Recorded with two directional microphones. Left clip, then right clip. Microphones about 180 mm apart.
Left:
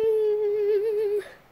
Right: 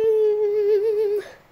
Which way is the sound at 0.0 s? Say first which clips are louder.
Right 4 dB; 10° right (ahead or behind).